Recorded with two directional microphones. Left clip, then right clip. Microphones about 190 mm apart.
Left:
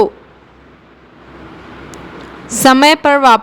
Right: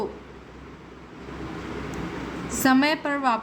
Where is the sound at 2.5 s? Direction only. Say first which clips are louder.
Left 13 dB; 50° left (ahead or behind).